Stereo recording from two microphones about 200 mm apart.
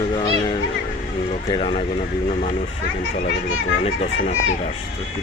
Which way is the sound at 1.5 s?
25° left (ahead or behind).